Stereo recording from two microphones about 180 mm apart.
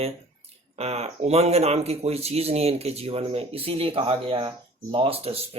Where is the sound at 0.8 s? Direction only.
35° right (ahead or behind).